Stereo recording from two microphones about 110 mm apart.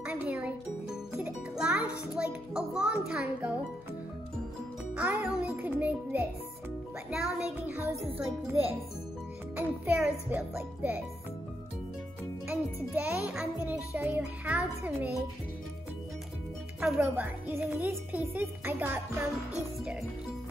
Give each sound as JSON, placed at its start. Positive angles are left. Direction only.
{"t": 0.0, "sound": "music", "side_deg": -10}
{"t": 4.9, "sound": "music", "side_deg": -10}
{"t": 9.9, "sound": "music", "side_deg": -10}
{"t": 12.4, "sound": "a child's voice", "side_deg": -15}
{"t": 13.3, "sound": "music", "side_deg": -10}
{"t": 16.8, "sound": "speech", "side_deg": 0}
{"t": 17.2, "sound": "music", "side_deg": -15}